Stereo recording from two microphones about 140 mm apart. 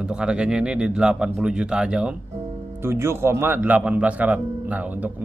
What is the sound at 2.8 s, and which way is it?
Speech, 20° right (ahead or behind).